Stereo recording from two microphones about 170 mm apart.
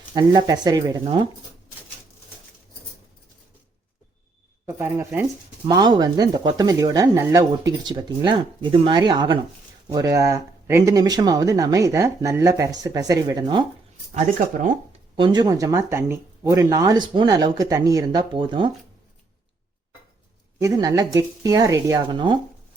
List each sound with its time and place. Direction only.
0.1 s speech: 25° right (ahead or behind)
1.0 s speech: 35° right (ahead or behind)
4.6 s speech: 15° right (ahead or behind)
5.6 s speech: 25° right (ahead or behind)
14.1 s speech: 45° right (ahead or behind)
15.1 s speech: 25° right (ahead or behind)
20.6 s speech: 20° right (ahead or behind)